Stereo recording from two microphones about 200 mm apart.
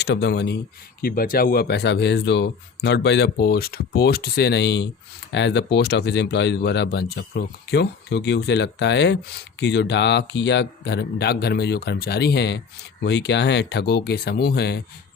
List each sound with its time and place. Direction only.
0.0 s speech: 55° left (ahead or behind)